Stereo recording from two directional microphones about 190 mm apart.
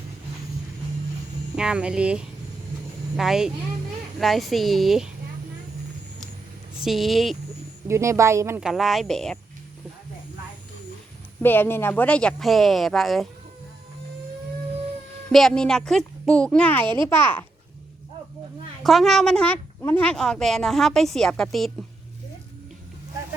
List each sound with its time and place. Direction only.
1.5 s a woman's voice: 5° right (ahead or behind)
6.8 s a woman's voice: centre (ahead or behind)
7.9 s speech: 15° right (ahead or behind)
8.6 s a woman's voice: centre (ahead or behind)
11.4 s a woman's voice: 10° left (ahead or behind)
15.3 s a woman's voice: centre (ahead or behind)
16.8 s a child's voice: 25° right (ahead or behind)
17.2 s a child's voice: 10° left (ahead or behind)
18.8 s a woman's voice: centre (ahead or behind)